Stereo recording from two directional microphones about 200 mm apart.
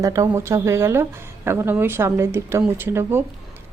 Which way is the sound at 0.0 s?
15° right (ahead or behind).